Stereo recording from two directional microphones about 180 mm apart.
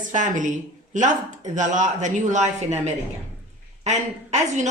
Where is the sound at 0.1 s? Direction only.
45° right (ahead or behind).